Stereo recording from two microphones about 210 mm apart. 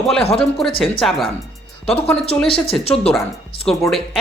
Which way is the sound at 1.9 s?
30° left (ahead or behind).